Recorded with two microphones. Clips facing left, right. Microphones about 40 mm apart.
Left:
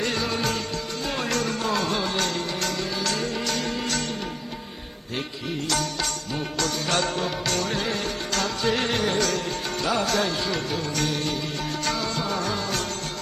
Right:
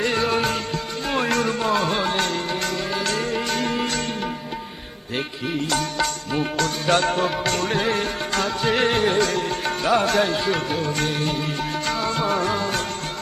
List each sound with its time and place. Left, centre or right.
0.0 s music: right
5.6 s music: right